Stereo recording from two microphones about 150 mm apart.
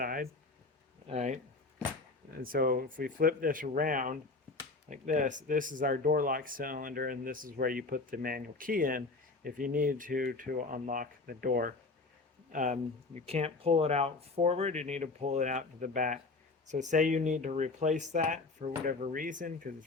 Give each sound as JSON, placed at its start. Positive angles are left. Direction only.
{"t": 0.0, "sound": "a sound", "side_deg": -75}
{"t": 1.0, "sound": "speech", "side_deg": -50}
{"t": 2.3, "sound": "speech", "side_deg": -80}
{"t": 12.5, "sound": "speech", "side_deg": -60}